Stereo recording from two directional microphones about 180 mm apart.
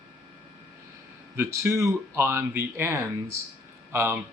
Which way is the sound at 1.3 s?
15° right (ahead or behind).